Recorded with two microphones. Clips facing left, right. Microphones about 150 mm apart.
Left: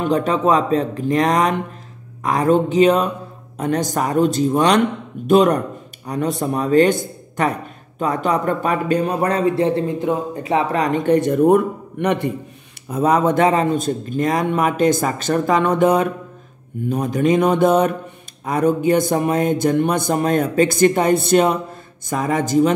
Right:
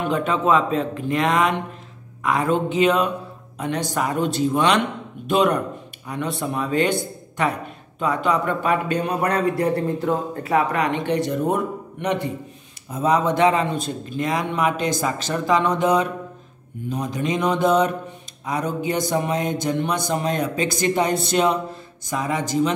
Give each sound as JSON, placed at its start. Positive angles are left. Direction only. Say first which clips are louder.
{"t": 0.0, "sound": "a man's voice", "louder": "left 4 dB", "side_deg": 40}